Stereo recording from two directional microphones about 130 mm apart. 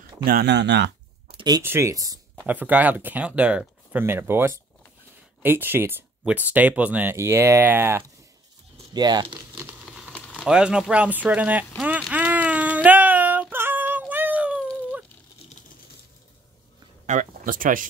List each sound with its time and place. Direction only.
1.3 s a sound: 35° right (ahead or behind)
1.6 s speech: 20° right (ahead or behind)
2.4 s speech: 15° right (ahead or behind)
8.9 s speech: 30° right (ahead or behind)
9.6 s patter: 15° right (ahead or behind)
10.2 s a sound: 5° left (ahead or behind)
10.5 s speech: 5° right (ahead or behind)
11.8 s child singing: 10° right (ahead or behind)
17.0 s a sound: 85° right